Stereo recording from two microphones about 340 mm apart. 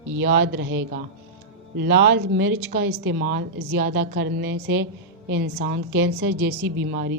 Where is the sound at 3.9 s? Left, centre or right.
Right.